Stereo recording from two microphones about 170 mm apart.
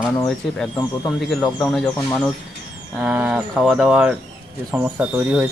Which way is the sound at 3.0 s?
5° right (ahead or behind).